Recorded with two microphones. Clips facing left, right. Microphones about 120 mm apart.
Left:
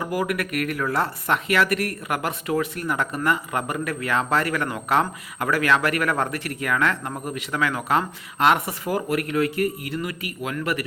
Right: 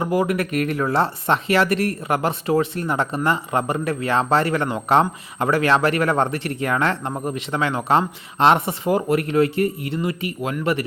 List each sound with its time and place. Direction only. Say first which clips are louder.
0.0 s speech: right 5 dB; 25° right (ahead or behind)